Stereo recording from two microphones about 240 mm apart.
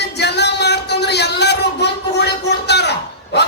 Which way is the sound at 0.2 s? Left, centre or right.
Left.